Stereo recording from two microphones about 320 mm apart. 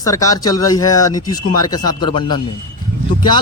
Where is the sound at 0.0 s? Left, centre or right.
Centre.